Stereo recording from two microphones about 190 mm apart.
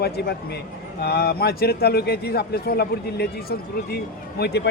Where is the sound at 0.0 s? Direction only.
55° left (ahead or behind).